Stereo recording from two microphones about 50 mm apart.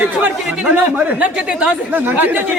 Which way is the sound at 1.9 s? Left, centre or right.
Right.